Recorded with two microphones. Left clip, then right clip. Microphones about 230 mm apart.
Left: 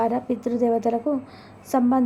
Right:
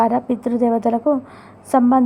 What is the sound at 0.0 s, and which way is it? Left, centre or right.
A woman's voice, centre.